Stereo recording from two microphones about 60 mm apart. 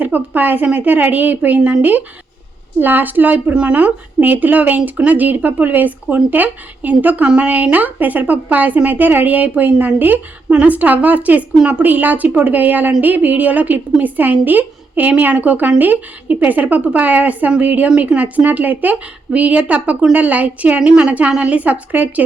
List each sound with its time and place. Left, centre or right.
0.0 s a woman's voice: right
3.4 s a woman's voice: centre
11.8 s a woman's voice: right